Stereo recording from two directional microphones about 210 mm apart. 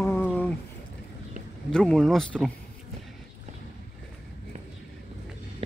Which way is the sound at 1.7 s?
5° left (ahead or behind).